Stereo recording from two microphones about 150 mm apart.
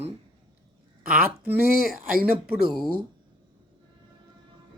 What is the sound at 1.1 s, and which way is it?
Speech, 10° right (ahead or behind).